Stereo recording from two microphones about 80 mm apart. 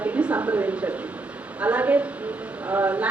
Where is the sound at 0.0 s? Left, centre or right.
Centre.